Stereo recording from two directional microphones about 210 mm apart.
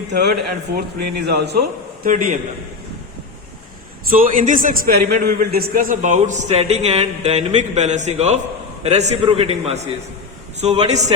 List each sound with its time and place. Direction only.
0.1 s speech: 50° right (ahead or behind)
2.0 s a man's voice: 40° right (ahead or behind)
4.1 s a man's voice: 40° right (ahead or behind)